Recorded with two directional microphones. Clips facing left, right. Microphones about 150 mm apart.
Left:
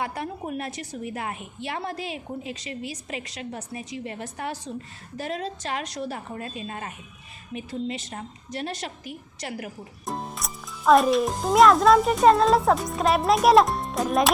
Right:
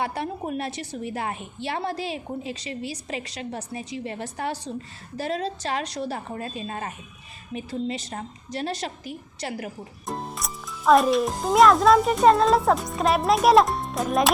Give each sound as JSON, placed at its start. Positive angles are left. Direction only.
{"t": 0.0, "sound": "a woman's voice", "side_deg": -25}
{"t": 10.1, "sound": "a child's voice", "side_deg": 0}